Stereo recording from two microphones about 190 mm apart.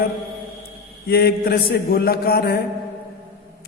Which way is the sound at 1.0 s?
55° left (ahead or behind).